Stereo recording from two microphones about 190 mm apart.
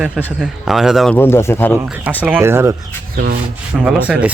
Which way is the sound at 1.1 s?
10° left (ahead or behind).